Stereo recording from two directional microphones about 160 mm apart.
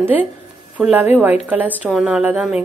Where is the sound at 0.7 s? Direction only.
10° right (ahead or behind).